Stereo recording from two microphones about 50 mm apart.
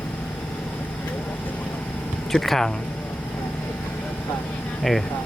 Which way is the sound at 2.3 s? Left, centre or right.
Centre.